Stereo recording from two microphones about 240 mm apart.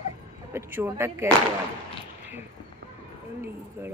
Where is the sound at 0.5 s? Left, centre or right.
Centre.